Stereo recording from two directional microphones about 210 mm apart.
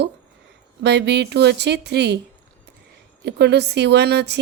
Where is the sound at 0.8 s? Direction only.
55° right (ahead or behind).